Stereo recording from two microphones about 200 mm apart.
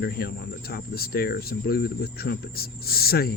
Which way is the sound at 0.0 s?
50° left (ahead or behind).